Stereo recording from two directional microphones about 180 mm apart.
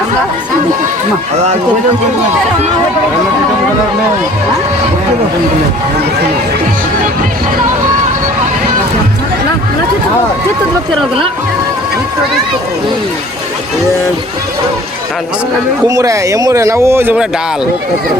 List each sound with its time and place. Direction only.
15.9 s speech: 20° right (ahead or behind)